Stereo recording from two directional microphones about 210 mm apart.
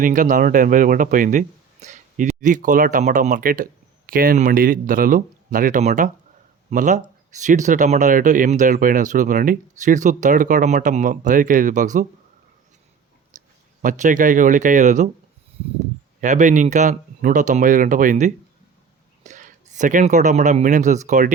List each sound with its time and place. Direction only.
0.0 s speech: 40° right (ahead or behind)
13.3 s a sound: 35° right (ahead or behind)
13.8 s speech: 35° right (ahead or behind)
16.2 s speech: 35° right (ahead or behind)